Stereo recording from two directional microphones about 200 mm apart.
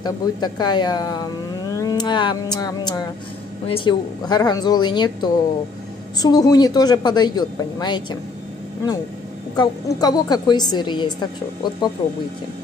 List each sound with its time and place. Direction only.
0.0 s a woman's voice: 20° left (ahead or behind)
9.6 s a woman's voice: 20° left (ahead or behind)